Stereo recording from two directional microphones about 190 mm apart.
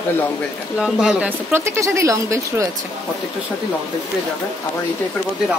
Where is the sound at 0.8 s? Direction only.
5° right (ahead or behind).